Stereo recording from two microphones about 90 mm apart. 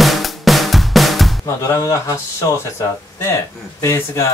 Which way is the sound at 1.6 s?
40° left (ahead or behind).